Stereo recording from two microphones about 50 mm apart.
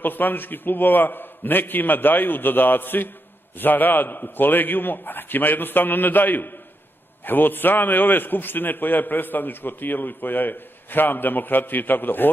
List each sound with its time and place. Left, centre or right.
0.0 s a man's voice: left